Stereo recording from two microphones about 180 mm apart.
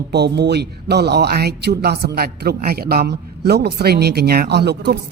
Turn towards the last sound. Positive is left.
turn(degrees=-65)  # may be behind; listen again after turning